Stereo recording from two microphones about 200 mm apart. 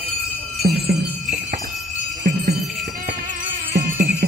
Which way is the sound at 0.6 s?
45° right (ahead or behind).